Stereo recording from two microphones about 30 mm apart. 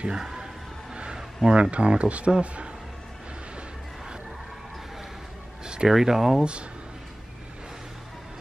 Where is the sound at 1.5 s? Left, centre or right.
Right.